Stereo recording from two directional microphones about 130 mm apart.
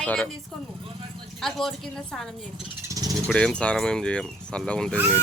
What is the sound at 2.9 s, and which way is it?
Vehicle, 25° right (ahead or behind).